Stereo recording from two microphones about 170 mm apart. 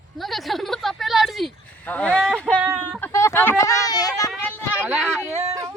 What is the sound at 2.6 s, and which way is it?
Speech, 10° right (ahead or behind).